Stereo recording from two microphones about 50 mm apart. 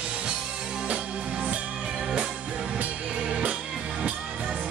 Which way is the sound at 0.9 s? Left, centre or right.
Right.